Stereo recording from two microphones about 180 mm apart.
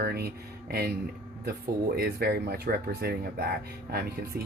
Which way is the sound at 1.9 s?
60° right (ahead or behind).